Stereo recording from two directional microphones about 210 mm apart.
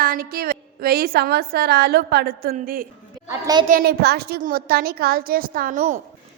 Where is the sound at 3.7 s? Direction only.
45° right (ahead or behind).